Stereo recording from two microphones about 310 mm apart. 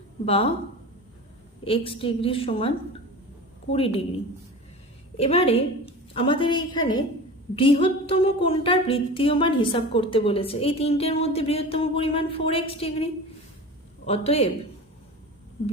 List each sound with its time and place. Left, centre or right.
0.3 s a woman's voice: centre
1.6 s a woman's voice: centre
5.1 s a woman's voice: centre